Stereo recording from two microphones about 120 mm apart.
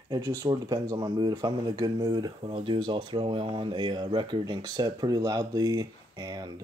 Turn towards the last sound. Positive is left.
turn(degrees=-35)  # may be behind; listen again after turning